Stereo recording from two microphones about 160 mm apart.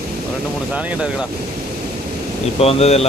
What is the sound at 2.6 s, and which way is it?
Speech, 40° left (ahead or behind).